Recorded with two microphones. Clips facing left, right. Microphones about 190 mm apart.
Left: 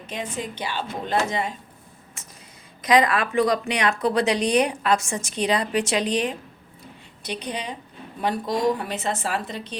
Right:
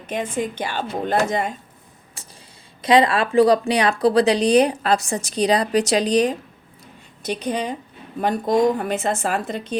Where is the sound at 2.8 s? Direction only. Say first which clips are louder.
Right 3 dB; 30° right (ahead or behind).